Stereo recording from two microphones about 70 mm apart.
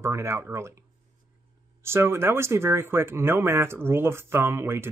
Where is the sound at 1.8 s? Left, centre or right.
Right.